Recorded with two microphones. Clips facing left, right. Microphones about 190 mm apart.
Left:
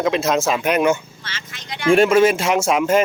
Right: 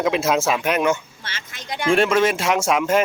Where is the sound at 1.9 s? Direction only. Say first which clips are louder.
Left 4 dB; 5° left (ahead or behind).